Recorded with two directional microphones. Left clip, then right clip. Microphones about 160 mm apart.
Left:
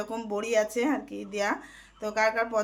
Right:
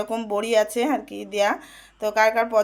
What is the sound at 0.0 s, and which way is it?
Speech, 20° right (ahead or behind).